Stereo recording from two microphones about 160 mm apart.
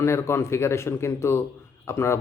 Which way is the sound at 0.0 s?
15° left (ahead or behind).